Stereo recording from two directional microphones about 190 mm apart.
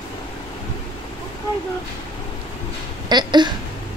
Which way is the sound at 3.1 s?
25° right (ahead or behind).